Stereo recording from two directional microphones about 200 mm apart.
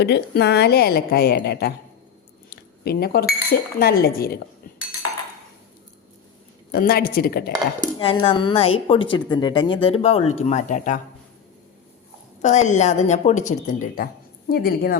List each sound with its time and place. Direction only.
0.0 s a woman's voice: 55° left (ahead or behind)
2.5 s a sound: 50° left (ahead or behind)
3.5 s a woman's voice: 50° left (ahead or behind)
6.7 s a woman's voice: 50° left (ahead or behind)
7.9 s speech: 25° left (ahead or behind); by 11.0 s 40° left (ahead or behind)
12.4 s speech: 35° left (ahead or behind)